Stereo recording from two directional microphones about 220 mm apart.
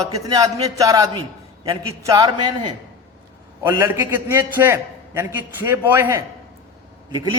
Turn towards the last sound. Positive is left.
turn(degrees=-20)  # may be behind; listen again after turning